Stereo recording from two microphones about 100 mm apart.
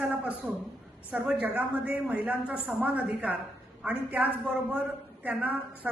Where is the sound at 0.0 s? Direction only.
5° right (ahead or behind).